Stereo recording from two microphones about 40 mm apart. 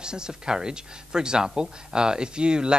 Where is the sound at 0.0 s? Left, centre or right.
Centre.